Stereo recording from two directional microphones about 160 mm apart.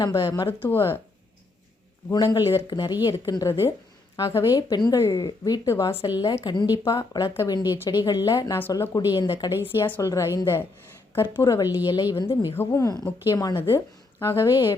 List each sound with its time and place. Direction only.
0.0 s a woman's voice: 20° left (ahead or behind)
2.0 s a woman's voice: 25° left (ahead or behind)